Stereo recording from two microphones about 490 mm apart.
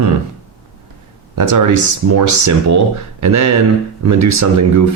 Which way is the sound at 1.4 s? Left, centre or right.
Right.